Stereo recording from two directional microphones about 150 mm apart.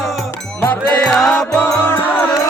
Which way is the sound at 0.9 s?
5° left (ahead or behind).